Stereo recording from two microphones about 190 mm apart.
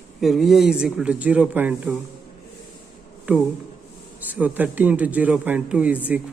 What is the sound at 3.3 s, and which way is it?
Speech, 10° right (ahead or behind).